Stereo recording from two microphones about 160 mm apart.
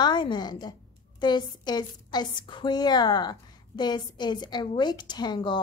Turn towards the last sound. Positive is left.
turn(degrees=30)  # may be behind; listen again after turning